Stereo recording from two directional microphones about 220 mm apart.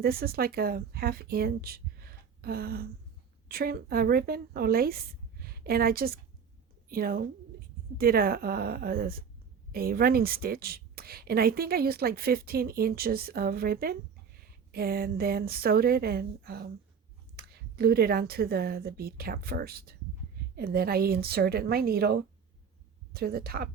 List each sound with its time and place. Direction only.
0.0 s a woman's voice: 45° right (ahead or behind)